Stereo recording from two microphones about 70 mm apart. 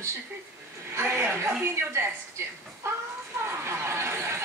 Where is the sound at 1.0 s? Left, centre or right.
Right.